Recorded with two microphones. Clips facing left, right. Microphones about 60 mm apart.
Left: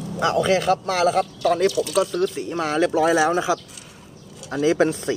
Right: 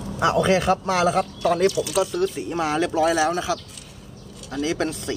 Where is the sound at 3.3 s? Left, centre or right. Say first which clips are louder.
Left 4 dB; centre.